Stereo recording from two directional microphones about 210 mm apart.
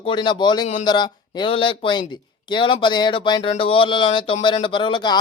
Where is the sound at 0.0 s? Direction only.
20° left (ahead or behind).